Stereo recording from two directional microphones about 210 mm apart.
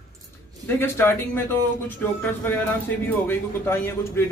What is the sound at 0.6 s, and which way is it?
Speech, 10° left (ahead or behind).